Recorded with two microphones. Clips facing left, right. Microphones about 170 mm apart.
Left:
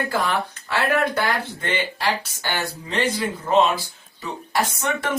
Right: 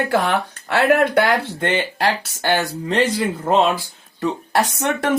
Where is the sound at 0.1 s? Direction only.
70° right (ahead or behind).